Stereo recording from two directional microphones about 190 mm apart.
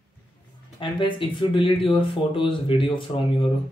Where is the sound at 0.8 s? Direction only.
25° left (ahead or behind).